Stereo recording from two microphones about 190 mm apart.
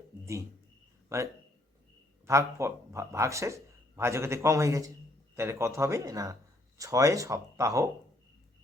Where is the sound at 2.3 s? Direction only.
15° right (ahead or behind).